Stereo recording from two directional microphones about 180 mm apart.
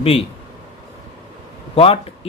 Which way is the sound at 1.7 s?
30° left (ahead or behind).